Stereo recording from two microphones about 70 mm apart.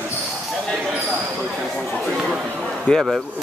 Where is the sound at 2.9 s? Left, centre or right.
Centre.